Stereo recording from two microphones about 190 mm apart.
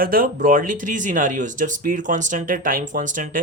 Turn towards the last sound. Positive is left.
turn(degrees=-45)  # may be behind; listen again after turning